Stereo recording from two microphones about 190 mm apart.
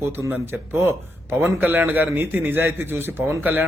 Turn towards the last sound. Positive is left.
turn(degrees=-10)  # may be behind; listen again after turning